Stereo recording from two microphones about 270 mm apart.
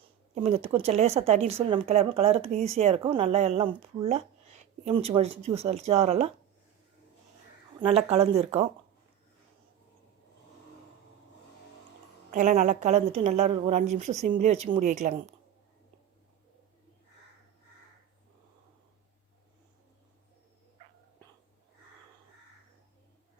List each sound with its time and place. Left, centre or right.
0.3 s speech: right
7.8 s speech: right
12.3 s speech: right